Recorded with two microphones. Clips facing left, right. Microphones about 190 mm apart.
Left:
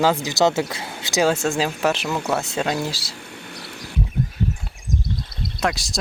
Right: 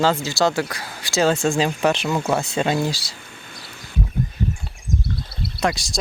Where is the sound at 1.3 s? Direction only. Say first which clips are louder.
Right 2 dB; 5° left (ahead or behind).